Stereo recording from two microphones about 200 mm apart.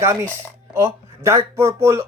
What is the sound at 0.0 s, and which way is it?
Speech, 15° right (ahead or behind).